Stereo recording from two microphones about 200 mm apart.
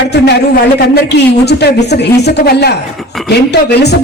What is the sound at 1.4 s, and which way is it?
A woman's voice, 55° left (ahead or behind).